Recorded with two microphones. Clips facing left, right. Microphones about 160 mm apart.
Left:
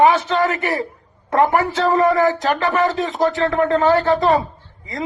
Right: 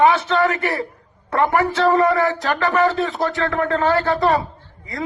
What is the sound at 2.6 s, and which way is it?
Speech, 20° left (ahead or behind).